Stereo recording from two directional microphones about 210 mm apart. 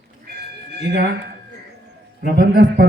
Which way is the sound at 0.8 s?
50° right (ahead or behind).